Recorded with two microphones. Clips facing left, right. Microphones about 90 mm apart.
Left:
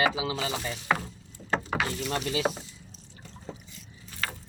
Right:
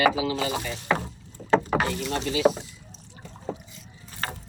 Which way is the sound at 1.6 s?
45° right (ahead or behind).